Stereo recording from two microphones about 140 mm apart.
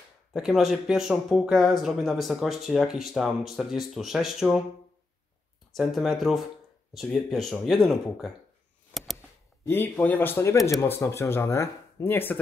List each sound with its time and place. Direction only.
0.3 s speech: centre (ahead or behind)
5.7 s speech: centre (ahead or behind)
8.9 s a sound: centre (ahead or behind)
9.7 s speech: 15° left (ahead or behind)